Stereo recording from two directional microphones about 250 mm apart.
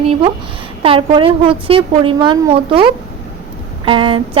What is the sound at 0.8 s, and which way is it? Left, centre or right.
A woman's voice, right.